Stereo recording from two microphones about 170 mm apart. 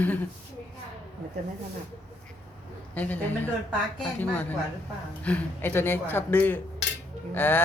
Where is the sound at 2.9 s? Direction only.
10° left (ahead or behind).